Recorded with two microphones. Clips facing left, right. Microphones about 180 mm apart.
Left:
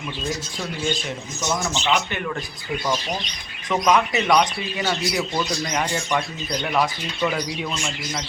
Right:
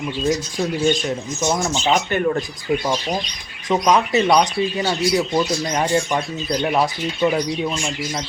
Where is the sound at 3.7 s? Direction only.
30° right (ahead or behind).